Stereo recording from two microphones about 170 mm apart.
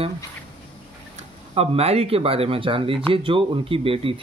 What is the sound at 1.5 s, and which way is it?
Speech, 35° right (ahead or behind).